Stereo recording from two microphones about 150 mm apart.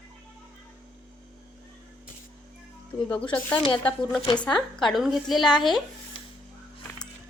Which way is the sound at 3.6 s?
35° left (ahead or behind).